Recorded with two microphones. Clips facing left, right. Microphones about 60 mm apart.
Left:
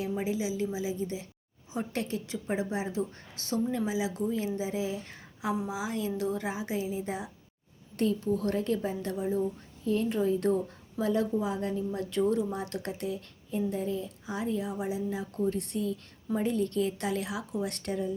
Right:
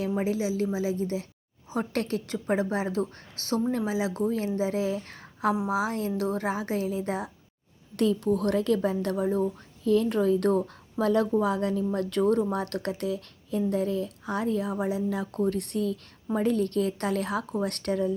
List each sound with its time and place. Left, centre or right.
0.3 s a woman's voice: right
0.6 s speech: right
3.4 s a woman's voice: right
4.1 s a woman's voice: right
7.9 s speech: right
11.9 s speech: right